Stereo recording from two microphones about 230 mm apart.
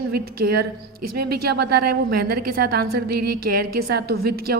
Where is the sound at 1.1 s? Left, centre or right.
Right.